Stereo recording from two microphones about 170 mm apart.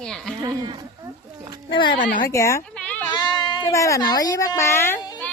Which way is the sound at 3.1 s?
25° left (ahead or behind).